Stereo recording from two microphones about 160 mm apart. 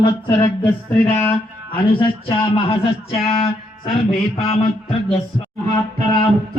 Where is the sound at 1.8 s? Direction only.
30° left (ahead or behind).